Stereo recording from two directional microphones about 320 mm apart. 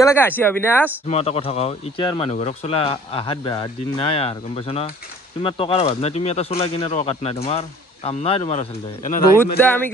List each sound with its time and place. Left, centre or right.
0.0 s speech: centre
1.0 s speech: centre
9.6 s speech: centre